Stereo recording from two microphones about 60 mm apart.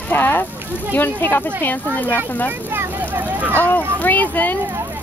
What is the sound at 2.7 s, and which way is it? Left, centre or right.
Vehicle, right.